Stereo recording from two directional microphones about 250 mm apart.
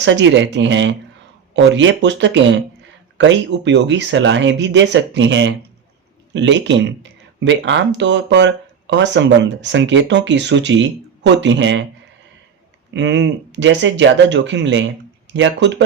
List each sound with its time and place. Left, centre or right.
0.0 s speech: right
12.9 s speech: right